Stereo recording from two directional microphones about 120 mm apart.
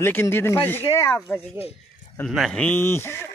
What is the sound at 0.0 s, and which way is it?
Speech, 20° left (ahead or behind).